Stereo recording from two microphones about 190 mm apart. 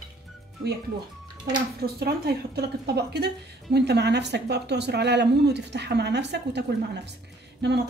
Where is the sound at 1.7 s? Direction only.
55° right (ahead or behind).